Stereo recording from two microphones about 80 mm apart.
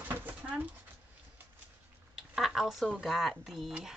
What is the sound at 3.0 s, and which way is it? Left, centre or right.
Speech, centre.